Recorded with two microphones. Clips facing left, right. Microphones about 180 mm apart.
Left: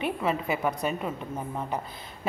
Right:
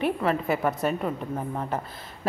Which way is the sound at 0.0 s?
Centre (ahead or behind).